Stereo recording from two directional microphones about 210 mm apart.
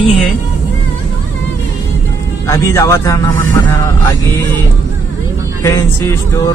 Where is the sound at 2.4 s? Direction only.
15° left (ahead or behind).